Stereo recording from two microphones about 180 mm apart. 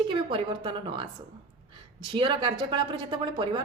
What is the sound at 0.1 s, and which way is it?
A woman's voice, 30° right (ahead or behind).